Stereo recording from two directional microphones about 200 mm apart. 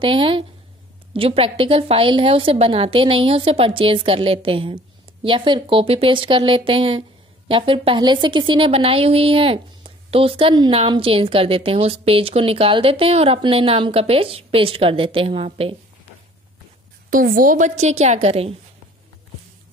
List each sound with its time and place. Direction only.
0.0 s a woman's voice: 25° right (ahead or behind)
17.1 s a woman's voice: 45° right (ahead or behind)